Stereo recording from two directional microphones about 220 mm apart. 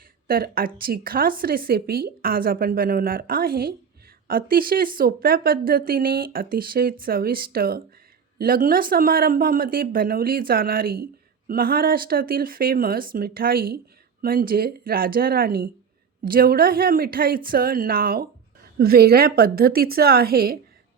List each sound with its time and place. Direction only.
0.3 s a woman's voice: 40° right (ahead or behind)